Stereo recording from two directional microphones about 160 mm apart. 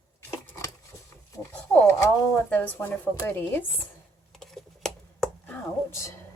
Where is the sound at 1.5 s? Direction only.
15° left (ahead or behind).